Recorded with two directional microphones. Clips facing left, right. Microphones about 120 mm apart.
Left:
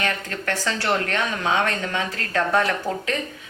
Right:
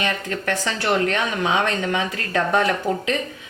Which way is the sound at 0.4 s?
15° right (ahead or behind).